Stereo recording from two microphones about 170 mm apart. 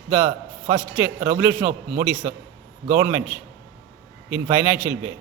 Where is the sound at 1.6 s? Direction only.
55° right (ahead or behind).